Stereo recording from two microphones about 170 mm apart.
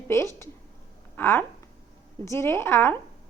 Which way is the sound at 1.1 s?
10° left (ahead or behind).